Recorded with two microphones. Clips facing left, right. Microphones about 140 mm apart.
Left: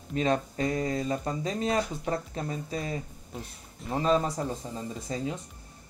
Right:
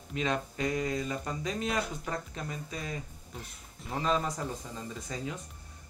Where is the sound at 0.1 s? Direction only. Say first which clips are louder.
Left 5 dB; 35° left (ahead or behind).